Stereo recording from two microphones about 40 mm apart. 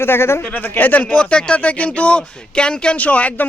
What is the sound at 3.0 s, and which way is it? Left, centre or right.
Speech, left.